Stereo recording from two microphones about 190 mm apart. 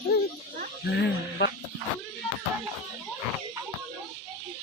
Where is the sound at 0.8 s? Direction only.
60° left (ahead or behind).